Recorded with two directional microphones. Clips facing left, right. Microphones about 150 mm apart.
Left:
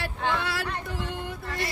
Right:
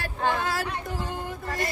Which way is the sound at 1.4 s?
45° right (ahead or behind).